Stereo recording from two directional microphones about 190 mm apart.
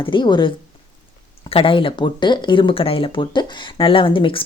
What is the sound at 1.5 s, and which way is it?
A woman's voice, 30° left (ahead or behind).